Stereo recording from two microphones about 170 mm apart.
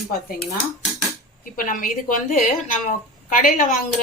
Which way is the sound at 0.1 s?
65° left (ahead or behind).